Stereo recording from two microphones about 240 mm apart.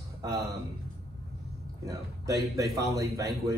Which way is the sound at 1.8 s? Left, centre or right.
Centre.